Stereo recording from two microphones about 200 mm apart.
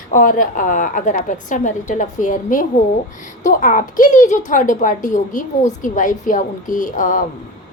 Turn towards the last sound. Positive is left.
turn(degrees=40)  # may be behind; listen again after turning